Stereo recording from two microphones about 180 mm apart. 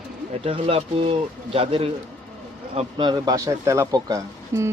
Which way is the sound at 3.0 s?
25° right (ahead or behind).